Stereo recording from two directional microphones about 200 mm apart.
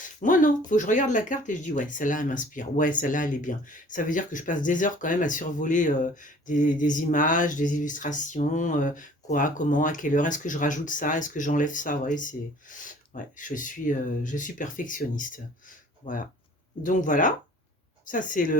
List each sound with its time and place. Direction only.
0.0 s speech: 40° left (ahead or behind)